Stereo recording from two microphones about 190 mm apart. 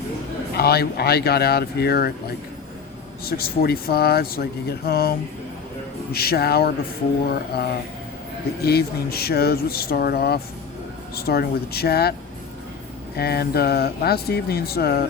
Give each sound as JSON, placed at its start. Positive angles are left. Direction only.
{"t": 0.5, "sound": "speech", "side_deg": 55}
{"t": 3.2, "sound": "speech", "side_deg": 55}
{"t": 8.6, "sound": "speech", "side_deg": 55}
{"t": 13.1, "sound": "speech", "side_deg": 55}